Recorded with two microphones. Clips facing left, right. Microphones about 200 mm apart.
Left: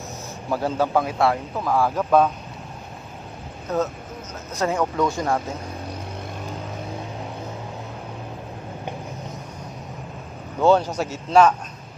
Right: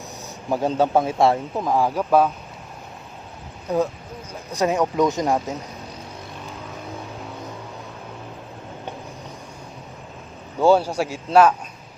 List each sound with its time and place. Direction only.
0.5 s speech: 20° right (ahead or behind)
3.7 s speech: 15° right (ahead or behind)
10.6 s speech: 10° right (ahead or behind)